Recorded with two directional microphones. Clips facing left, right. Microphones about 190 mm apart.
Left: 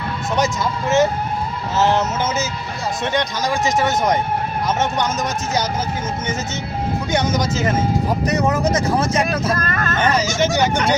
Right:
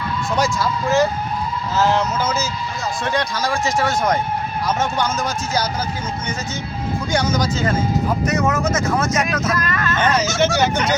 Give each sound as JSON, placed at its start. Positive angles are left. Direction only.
{"t": 0.3, "sound": "speech", "side_deg": 20}
{"t": 7.1, "sound": "speech", "side_deg": 20}
{"t": 8.3, "sound": "speech", "side_deg": 35}
{"t": 9.6, "sound": "speech", "side_deg": 45}
{"t": 10.0, "sound": "speech", "side_deg": 10}